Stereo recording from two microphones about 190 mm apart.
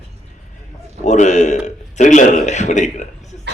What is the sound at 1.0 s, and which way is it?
A man's voice, 40° left (ahead or behind).